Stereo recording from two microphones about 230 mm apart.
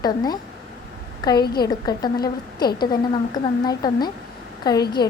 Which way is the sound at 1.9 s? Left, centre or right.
Centre.